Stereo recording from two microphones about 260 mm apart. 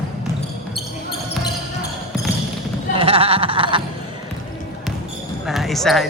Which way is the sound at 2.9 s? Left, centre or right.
Right.